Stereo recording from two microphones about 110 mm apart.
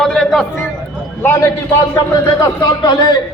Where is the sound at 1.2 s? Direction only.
20° left (ahead or behind); by 3.1 s 40° left (ahead or behind).